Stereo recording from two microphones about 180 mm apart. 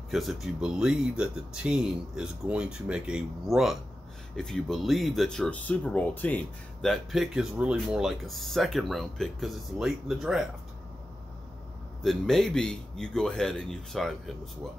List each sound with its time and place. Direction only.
0.1 s speech: centre (ahead or behind)
12.0 s speech: centre (ahead or behind)